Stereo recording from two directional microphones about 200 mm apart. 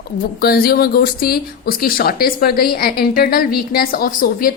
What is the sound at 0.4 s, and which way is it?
A woman's voice, 50° left (ahead or behind).